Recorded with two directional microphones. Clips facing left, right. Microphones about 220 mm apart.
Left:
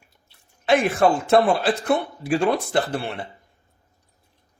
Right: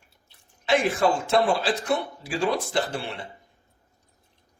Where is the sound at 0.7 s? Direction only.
60° left (ahead or behind).